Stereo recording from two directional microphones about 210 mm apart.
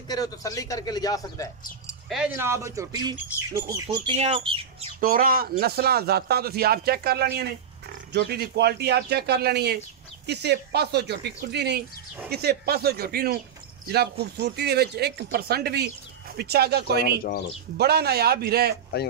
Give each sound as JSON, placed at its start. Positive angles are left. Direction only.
{"t": 0.1, "sound": "a man's voice", "side_deg": 15}
{"t": 1.9, "sound": "a sound", "side_deg": -5}
{"t": 2.3, "sound": "speech", "side_deg": -15}
{"t": 5.0, "sound": "speech", "side_deg": -45}